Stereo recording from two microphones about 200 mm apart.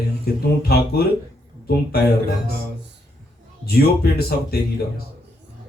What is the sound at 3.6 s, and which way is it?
Speech, 50° left (ahead or behind).